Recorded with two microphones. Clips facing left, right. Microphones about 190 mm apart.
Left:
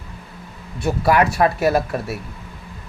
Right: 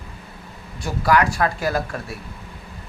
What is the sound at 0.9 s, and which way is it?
Speech, 25° left (ahead or behind).